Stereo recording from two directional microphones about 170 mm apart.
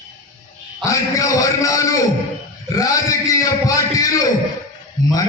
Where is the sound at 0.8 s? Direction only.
20° left (ahead or behind).